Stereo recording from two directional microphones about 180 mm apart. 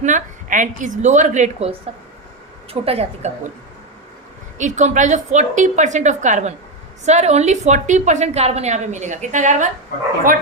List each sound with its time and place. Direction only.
0.0 s a woman's voice: 45° right (ahead or behind)
2.8 s a woman's voice: 35° right (ahead or behind)
4.5 s a woman's voice: 40° right (ahead or behind)